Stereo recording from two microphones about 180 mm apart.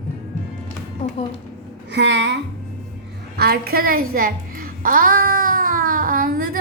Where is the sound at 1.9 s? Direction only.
70° right (ahead or behind).